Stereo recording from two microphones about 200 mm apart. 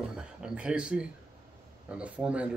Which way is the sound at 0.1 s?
5° right (ahead or behind).